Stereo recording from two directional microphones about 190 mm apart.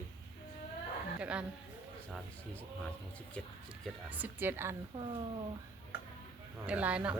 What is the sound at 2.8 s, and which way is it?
Speech, 5° left (ahead or behind).